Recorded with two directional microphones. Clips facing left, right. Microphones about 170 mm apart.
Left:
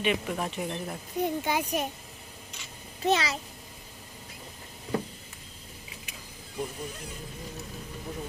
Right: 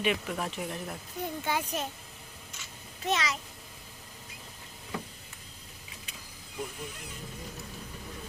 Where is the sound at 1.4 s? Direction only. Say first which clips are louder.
Left 3 dB; 15° left (ahead or behind).